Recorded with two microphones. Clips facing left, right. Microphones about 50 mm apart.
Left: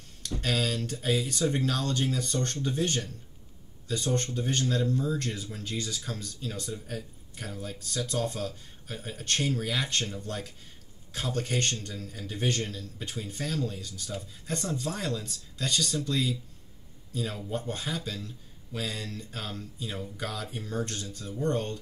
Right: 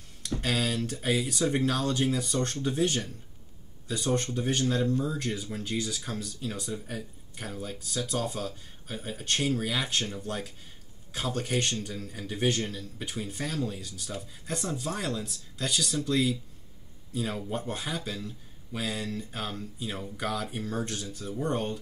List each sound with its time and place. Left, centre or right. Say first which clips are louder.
0.4 s speech: even; centre